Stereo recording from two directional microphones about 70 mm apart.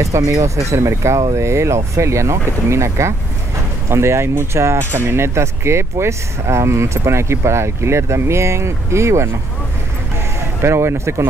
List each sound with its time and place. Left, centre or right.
0.0 s speech: right
10.6 s speech: right